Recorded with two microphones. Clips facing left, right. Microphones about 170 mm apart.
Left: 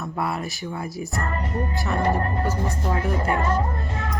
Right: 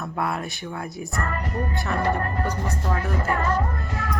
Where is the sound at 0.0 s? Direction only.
Centre (ahead or behind).